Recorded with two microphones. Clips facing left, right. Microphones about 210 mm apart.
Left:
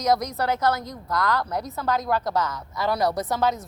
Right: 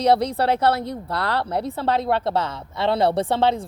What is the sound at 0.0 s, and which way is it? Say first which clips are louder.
A woman's voice: right 5 dB; 30° right (ahead or behind).